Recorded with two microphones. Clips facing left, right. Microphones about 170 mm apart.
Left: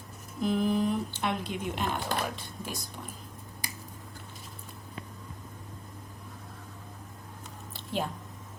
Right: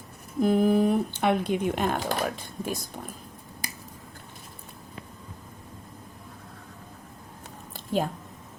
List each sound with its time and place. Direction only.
0.4 s speech: 50° right (ahead or behind)
7.9 s speech: 45° right (ahead or behind)